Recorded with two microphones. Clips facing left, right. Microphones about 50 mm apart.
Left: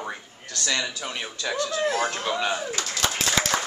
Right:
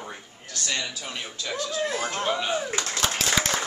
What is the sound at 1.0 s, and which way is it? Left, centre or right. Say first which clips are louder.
Speech: left 3 dB; left.